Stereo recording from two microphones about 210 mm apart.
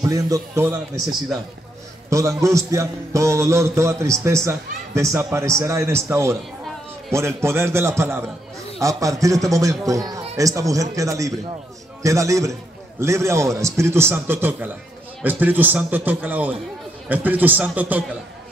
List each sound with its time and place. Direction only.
0.0 s a man's voice: 15° right (ahead or behind)
2.0 s a man's voice: 15° right (ahead or behind)